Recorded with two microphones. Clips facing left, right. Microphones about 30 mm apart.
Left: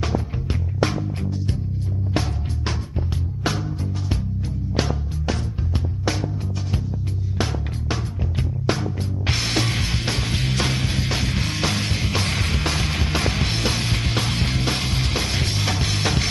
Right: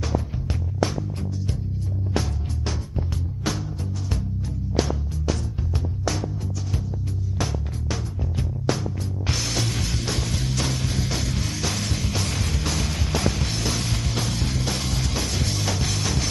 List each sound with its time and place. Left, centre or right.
0.0 s music: left
4.7 s music: left
7.9 s music: left